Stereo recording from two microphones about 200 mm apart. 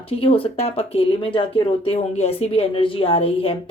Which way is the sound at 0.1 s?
30° left (ahead or behind).